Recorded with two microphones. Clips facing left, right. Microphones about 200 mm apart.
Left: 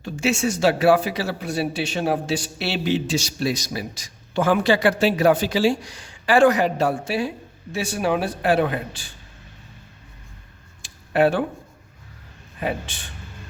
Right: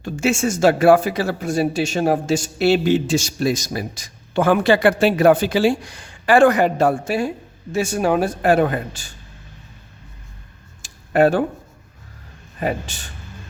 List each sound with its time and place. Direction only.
0.0 s speech: 50° right (ahead or behind)
10.8 s a sound: 45° right (ahead or behind)
12.5 s speech: 45° right (ahead or behind)